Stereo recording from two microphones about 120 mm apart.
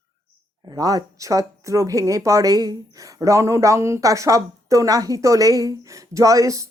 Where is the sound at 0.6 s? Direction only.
30° right (ahead or behind).